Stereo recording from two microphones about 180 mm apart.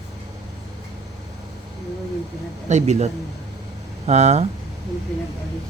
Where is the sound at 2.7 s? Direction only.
40° right (ahead or behind).